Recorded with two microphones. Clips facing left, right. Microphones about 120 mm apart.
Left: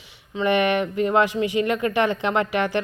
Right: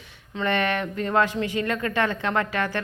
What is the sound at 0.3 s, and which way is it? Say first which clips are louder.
A woman's voice: left 4 dB; 15° left (ahead or behind).